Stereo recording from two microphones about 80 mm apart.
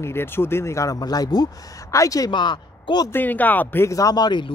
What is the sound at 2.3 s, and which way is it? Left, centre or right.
Speech, left.